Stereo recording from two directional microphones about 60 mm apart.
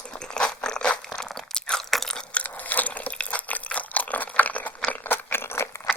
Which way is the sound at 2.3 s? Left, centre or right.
Left.